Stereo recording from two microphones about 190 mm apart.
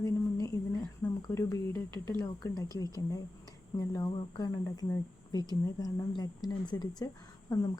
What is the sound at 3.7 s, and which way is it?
Speech, 20° left (ahead or behind).